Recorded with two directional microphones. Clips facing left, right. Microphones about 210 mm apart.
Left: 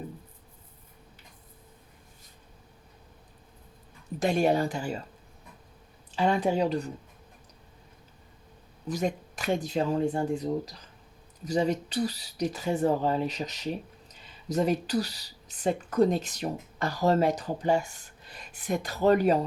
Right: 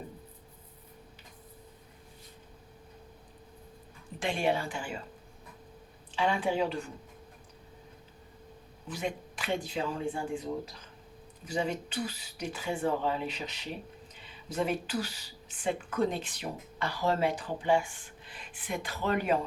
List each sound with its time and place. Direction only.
4.2 s speech: 40° left (ahead or behind)
6.1 s speech: 40° left (ahead or behind)
8.9 s speech: 40° left (ahead or behind)